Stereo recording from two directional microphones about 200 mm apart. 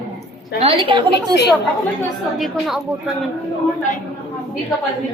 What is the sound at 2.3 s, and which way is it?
Speech, centre (ahead or behind).